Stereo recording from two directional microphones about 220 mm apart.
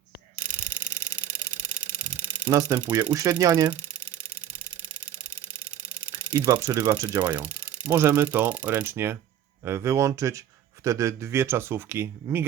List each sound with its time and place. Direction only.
0.8 s a sound: 5° right (ahead or behind)
2.0 s speech: 5° right (ahead or behind)
6.3 s speech: 15° right (ahead or behind)